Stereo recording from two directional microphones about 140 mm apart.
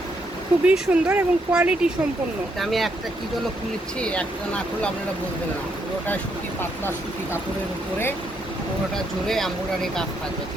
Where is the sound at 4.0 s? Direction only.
10° left (ahead or behind).